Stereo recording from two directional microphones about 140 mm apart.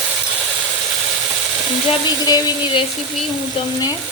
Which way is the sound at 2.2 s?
30° left (ahead or behind).